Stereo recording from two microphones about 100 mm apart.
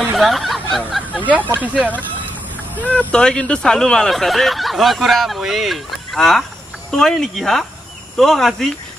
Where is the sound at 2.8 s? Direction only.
10° left (ahead or behind).